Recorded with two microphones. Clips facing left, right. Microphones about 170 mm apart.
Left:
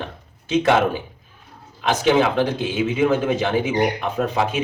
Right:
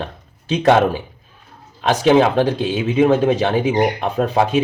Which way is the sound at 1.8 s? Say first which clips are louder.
Right 4 dB; 35° right (ahead or behind).